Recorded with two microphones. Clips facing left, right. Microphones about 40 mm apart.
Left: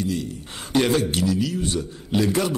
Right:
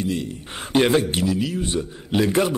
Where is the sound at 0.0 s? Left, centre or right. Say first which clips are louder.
Right 1 dB; right.